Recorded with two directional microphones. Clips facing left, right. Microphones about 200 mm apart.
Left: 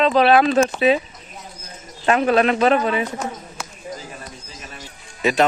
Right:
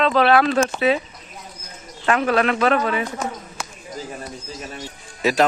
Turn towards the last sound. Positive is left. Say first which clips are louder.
# even
turn(degrees=0)  # may be behind; listen again after turning